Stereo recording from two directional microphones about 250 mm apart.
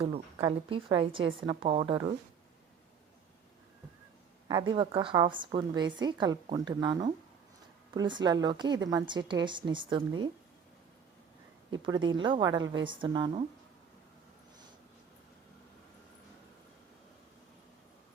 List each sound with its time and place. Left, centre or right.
0.0 s a woman's voice: right
4.4 s a woman's voice: centre
11.7 s a woman's voice: centre